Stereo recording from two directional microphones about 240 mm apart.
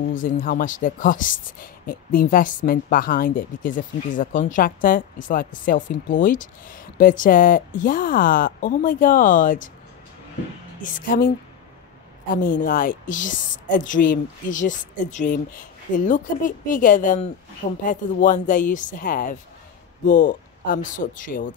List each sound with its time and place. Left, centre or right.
0.1 s speech: left
10.8 s speech: left
12.4 s speech: left